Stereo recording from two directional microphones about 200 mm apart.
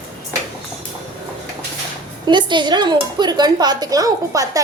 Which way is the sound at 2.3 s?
25° right (ahead or behind).